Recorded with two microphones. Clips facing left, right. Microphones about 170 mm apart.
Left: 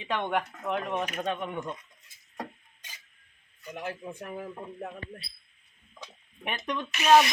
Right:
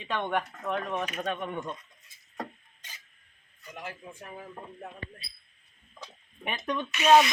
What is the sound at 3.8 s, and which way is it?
Speech, 45° left (ahead or behind).